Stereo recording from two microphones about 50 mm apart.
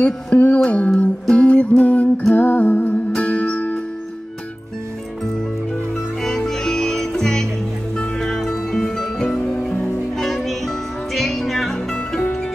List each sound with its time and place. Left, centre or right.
0.0 s music: left
2.3 s humming: left
3.2 s music: left
6.2 s music: centre